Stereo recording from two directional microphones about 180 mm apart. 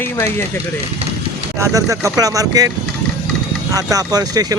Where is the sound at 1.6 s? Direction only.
20° right (ahead or behind).